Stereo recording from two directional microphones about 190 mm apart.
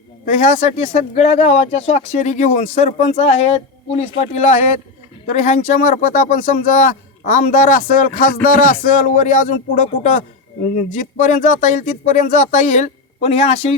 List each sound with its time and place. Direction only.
0.3 s speech: 40° left (ahead or behind)